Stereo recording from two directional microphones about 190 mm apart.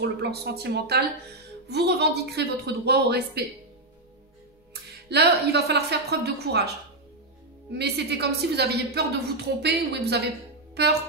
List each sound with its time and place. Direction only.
0.0 s a woman's voice: 60° right (ahead or behind)
5.1 s a woman's voice: 60° right (ahead or behind)
7.7 s a woman's voice: 60° right (ahead or behind)